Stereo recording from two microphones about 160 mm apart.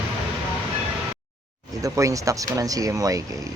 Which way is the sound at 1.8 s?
20° right (ahead or behind).